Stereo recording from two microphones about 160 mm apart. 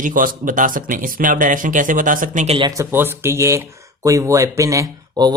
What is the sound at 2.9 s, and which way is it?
Speech, 15° right (ahead or behind).